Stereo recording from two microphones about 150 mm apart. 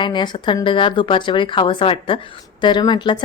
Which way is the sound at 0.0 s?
30° left (ahead or behind).